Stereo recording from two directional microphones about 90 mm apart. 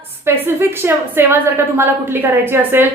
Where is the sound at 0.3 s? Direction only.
25° right (ahead or behind).